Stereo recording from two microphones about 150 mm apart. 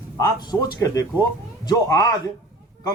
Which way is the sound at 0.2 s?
25° left (ahead or behind).